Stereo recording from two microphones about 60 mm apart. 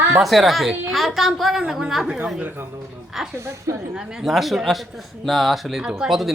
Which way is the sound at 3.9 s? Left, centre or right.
Centre.